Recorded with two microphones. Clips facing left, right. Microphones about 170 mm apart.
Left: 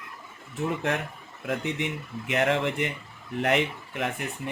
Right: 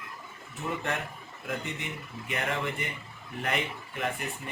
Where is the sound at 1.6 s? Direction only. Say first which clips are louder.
Left 7 dB; 70° left (ahead or behind).